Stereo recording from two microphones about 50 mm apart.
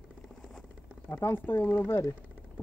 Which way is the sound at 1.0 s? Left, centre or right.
Left.